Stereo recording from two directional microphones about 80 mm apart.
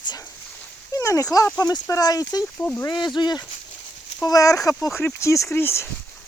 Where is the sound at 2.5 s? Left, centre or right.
Left.